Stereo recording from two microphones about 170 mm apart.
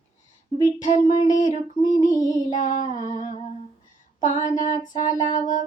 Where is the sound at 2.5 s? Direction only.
50° left (ahead or behind).